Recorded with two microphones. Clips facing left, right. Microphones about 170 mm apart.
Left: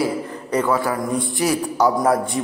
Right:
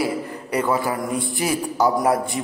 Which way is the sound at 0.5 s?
15° right (ahead or behind).